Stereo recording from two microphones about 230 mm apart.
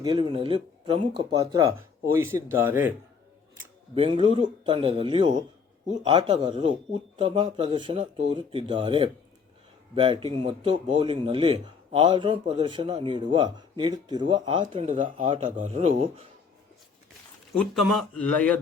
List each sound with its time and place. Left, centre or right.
0.0 s speech: centre
3.9 s speech: right
14.8 s speech: right
17.5 s speech: centre